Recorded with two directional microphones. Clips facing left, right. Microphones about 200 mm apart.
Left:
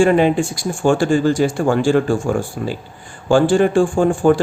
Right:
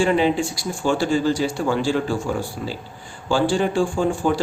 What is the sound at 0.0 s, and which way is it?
Speech, 50° left (ahead or behind).